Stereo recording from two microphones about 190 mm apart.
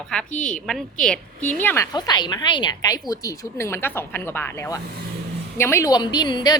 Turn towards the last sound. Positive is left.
turn(degrees=25)  # may be behind; listen again after turning